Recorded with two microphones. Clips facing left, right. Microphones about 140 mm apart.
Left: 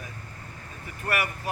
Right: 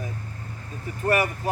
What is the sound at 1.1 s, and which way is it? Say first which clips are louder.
Speech: right 6 dB; 25° right (ahead or behind).